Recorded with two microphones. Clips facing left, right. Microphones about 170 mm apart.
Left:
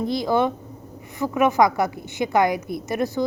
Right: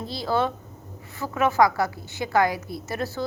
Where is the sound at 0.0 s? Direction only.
15° left (ahead or behind).